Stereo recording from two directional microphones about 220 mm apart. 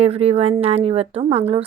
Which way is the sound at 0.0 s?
30° right (ahead or behind).